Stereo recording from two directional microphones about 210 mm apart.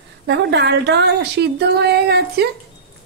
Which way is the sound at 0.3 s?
55° right (ahead or behind).